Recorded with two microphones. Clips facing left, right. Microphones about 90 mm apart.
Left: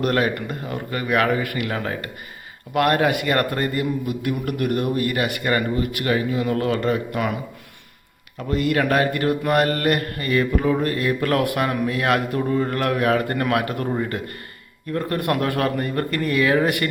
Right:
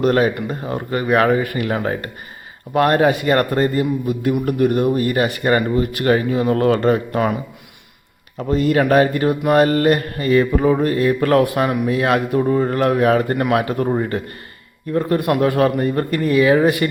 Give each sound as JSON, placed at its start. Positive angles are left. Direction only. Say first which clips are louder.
{"t": 0.0, "sound": "a man's voice", "louder": "right 5 dB", "side_deg": -25}
{"t": 8.4, "sound": "a man's voice", "louder": "right 5 dB", "side_deg": -25}